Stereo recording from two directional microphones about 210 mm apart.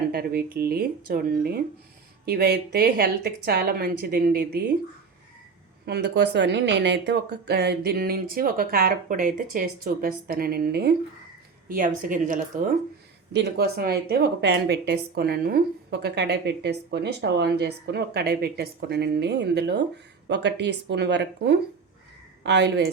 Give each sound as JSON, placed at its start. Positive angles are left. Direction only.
{"t": 0.1, "sound": "speech", "side_deg": -50}
{"t": 5.8, "sound": "a woman's voice", "side_deg": -50}
{"t": 13.3, "sound": "speech", "side_deg": -50}